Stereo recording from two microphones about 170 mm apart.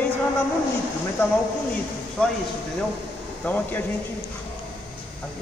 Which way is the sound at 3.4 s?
5° left (ahead or behind).